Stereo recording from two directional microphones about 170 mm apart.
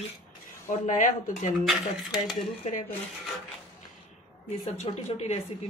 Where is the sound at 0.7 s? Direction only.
50° left (ahead or behind).